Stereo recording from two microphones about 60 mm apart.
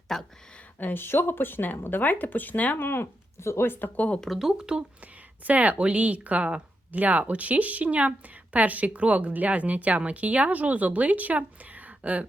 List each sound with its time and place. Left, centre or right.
0.1 s speech: centre
0.8 s speech: left
2.8 s speech: left
3.7 s speech: left
4.4 s speech: centre
5.5 s a woman's voice: right